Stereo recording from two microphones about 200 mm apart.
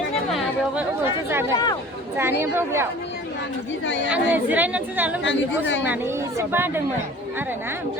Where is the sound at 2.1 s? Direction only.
10° right (ahead or behind).